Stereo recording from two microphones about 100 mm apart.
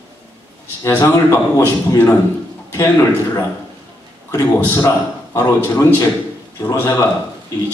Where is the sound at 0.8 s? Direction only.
25° left (ahead or behind).